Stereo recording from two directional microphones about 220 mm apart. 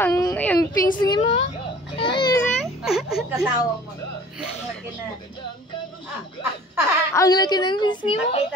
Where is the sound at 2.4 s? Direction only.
Centre (ahead or behind).